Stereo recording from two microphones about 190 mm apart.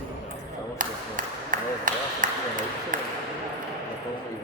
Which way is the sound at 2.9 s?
45° right (ahead or behind).